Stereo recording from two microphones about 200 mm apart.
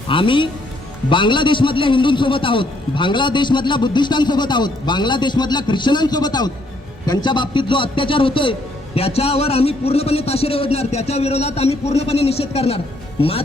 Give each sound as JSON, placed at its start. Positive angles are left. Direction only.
{"t": 0.1, "sound": "a man's voice", "side_deg": 25}